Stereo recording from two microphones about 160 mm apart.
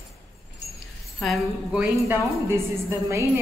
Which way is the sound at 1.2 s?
5° right (ahead or behind).